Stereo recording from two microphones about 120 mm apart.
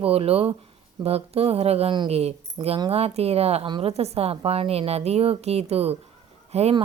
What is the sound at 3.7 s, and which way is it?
Speech, 45° right (ahead or behind).